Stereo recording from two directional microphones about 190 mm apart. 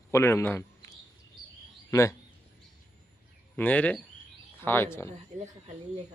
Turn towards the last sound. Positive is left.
turn(degrees=10)  # may be behind; listen again after turning